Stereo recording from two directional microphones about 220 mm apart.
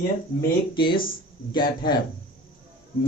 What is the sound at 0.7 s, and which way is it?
Speech, 20° left (ahead or behind).